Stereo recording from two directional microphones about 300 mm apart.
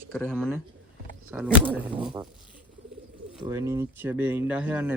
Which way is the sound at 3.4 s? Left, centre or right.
Centre.